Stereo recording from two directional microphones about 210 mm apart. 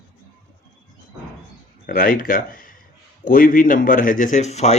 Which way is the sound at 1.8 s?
40° left (ahead or behind).